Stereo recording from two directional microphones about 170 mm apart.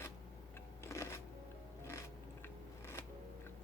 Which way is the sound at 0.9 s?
15° left (ahead or behind).